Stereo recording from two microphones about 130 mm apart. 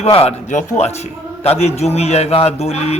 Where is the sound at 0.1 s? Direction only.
50° left (ahead or behind).